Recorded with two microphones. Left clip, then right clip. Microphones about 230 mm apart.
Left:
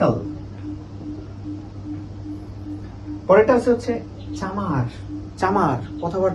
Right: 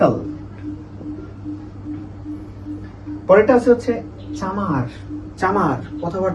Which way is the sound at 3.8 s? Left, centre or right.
Centre.